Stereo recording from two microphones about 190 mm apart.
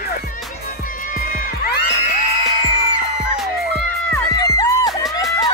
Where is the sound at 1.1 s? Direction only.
50° left (ahead or behind).